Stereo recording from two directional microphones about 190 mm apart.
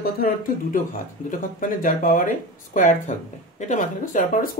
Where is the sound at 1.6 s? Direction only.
45° left (ahead or behind).